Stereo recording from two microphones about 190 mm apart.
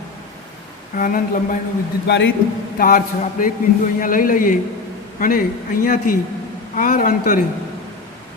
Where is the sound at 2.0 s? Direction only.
75° left (ahead or behind).